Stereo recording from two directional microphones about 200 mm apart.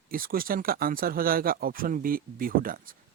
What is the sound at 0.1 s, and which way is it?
Speech, 45° right (ahead or behind).